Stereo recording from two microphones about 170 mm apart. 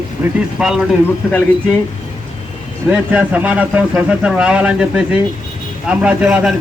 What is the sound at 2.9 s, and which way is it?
Speech, 10° right (ahead or behind).